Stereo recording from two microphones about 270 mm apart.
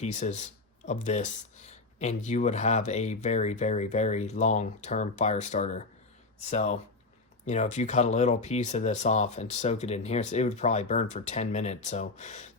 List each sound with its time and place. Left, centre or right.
0.0 s speech: left